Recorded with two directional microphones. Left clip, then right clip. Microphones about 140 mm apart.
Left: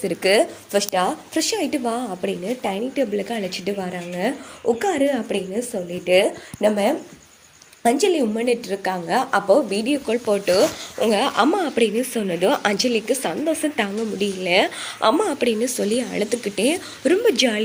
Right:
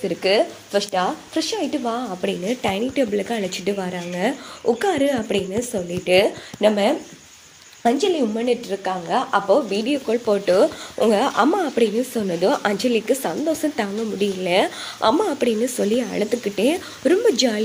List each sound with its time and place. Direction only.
0.0 s a woman's voice: 10° left (ahead or behind)
2.2 s a woman's voice: 15° right (ahead or behind)
6.7 s a woman's voice: centre (ahead or behind)
7.9 s a woman's voice: 15° left (ahead or behind)
9.7 s a woman's voice: centre (ahead or behind); by 11.3 s 15° right (ahead or behind)
11.3 s a woman's voice: centre (ahead or behind)